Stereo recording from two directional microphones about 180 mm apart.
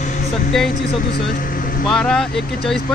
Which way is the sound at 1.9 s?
5° left (ahead or behind).